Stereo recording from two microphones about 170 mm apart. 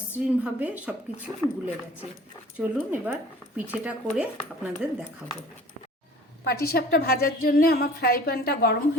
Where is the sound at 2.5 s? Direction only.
10° right (ahead or behind).